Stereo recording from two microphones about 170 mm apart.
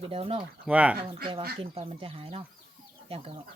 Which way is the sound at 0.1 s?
35° right (ahead or behind).